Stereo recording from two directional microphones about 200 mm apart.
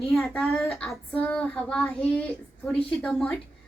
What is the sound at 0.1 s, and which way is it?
A woman's voice, centre (ahead or behind).